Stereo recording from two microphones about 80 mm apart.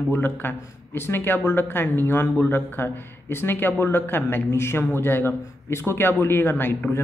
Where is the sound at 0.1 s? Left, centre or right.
Left.